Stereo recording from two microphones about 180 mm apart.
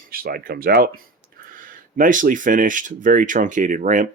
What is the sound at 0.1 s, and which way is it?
Speech, 55° right (ahead or behind).